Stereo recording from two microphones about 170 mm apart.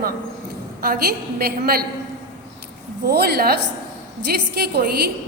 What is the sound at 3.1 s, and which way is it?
A woman's voice, 65° right (ahead or behind).